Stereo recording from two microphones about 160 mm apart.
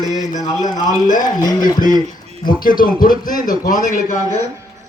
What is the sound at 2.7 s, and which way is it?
A man's voice, 60° left (ahead or behind).